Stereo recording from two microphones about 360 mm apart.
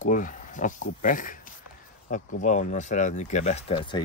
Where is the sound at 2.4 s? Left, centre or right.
Centre.